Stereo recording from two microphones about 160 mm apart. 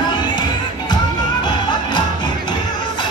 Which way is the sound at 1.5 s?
30° left (ahead or behind).